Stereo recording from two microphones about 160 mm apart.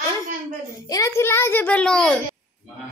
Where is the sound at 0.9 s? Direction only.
20° left (ahead or behind); by 2.2 s 5° left (ahead or behind).